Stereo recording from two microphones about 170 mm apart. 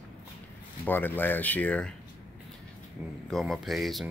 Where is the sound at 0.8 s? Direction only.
10° left (ahead or behind).